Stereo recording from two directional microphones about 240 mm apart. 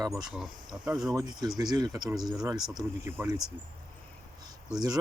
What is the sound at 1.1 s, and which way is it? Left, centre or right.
Speech, centre.